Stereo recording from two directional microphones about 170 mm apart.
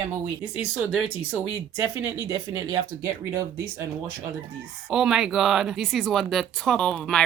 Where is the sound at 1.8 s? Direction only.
15° right (ahead or behind).